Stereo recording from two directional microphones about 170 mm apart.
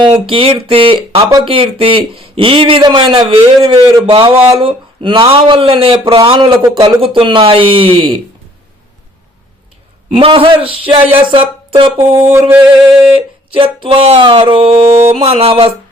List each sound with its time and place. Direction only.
0.0 s speech: 30° right (ahead or behind)
10.1 s speech: 35° right (ahead or behind)
12.3 s a sound: 10° right (ahead or behind)
13.1 s speech: 30° right (ahead or behind)